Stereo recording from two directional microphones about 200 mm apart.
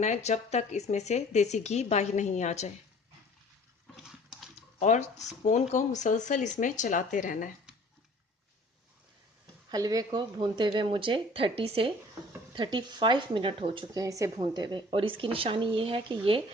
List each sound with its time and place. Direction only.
0.0 s speech: 35° left (ahead or behind)
4.0 s dog: centre (ahead or behind)
4.8 s speech: 35° left (ahead or behind)
9.6 s speech: 20° right (ahead or behind)